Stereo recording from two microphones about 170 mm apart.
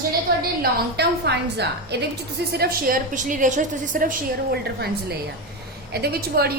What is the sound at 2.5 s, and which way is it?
A woman's voice, 65° right (ahead or behind).